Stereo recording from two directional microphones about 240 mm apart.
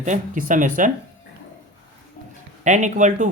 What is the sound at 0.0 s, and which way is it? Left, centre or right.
Speech, right.